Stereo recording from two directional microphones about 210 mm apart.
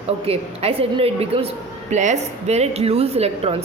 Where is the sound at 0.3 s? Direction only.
30° right (ahead or behind).